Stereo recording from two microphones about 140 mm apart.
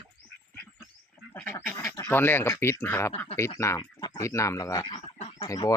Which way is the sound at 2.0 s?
15° left (ahead or behind).